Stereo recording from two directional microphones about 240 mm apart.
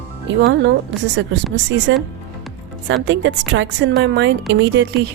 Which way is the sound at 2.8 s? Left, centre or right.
Right.